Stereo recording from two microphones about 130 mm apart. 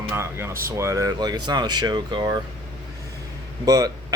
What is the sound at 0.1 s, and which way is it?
Speech, 20° right (ahead or behind).